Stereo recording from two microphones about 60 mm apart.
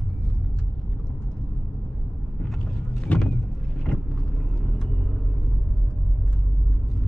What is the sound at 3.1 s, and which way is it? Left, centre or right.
Vehicle, left.